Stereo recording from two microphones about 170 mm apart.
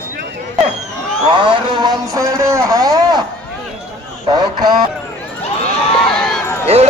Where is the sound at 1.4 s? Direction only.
30° right (ahead or behind).